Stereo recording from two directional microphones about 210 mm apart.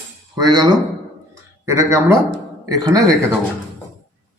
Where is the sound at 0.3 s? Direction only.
20° right (ahead or behind).